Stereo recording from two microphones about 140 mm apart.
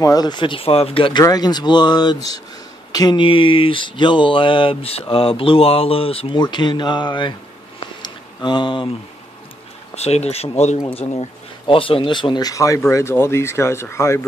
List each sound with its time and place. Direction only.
0.0 s speech: 25° left (ahead or behind)
8.5 s speech: 35° left (ahead or behind)
9.9 s speech: 50° left (ahead or behind); by 14.2 s 20° left (ahead or behind)